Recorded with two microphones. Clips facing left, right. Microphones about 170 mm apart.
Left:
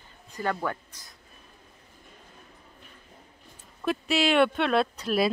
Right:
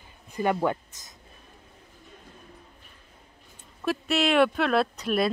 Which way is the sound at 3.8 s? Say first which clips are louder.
Even; centre (ahead or behind).